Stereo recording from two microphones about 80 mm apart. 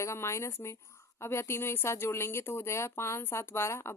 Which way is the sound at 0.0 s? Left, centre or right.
Left.